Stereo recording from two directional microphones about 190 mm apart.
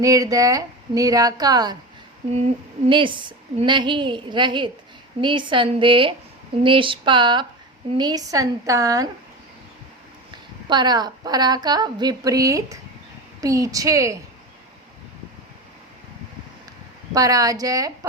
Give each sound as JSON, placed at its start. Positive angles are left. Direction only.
{"t": 0.0, "sound": "a woman's voice", "side_deg": -20}
{"t": 2.9, "sound": "a woman's voice", "side_deg": -25}
{"t": 10.7, "sound": "a woman's voice", "side_deg": -20}
{"t": 17.2, "sound": "a woman's voice", "side_deg": -20}